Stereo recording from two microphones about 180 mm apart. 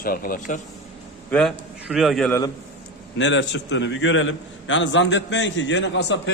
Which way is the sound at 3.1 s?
90° left.